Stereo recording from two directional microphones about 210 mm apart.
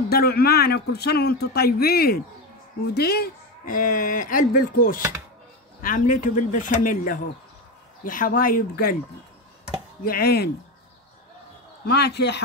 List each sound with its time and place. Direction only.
0.1 s a man's voice: 45° left (ahead or behind)
10.0 s a man's voice: 45° left (ahead or behind)
11.8 s a man's voice: 50° left (ahead or behind)